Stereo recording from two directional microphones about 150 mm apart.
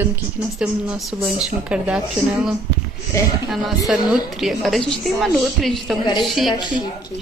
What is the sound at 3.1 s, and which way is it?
Speech, 20° left (ahead or behind).